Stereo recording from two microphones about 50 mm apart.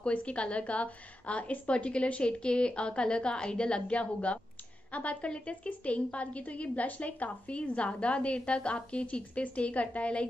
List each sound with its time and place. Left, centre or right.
0.0 s a woman's voice: left